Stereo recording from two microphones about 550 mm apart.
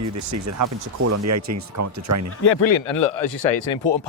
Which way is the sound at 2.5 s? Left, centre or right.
Left.